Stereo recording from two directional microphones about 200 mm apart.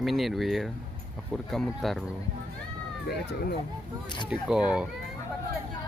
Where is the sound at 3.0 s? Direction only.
55° left (ahead or behind).